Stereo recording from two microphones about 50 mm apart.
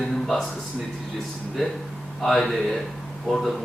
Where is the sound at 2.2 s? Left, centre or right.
Centre.